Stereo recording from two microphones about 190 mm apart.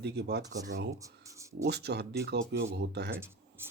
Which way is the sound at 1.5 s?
60° right (ahead or behind).